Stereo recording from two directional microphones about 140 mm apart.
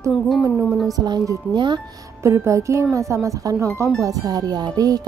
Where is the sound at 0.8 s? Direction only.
30° right (ahead or behind).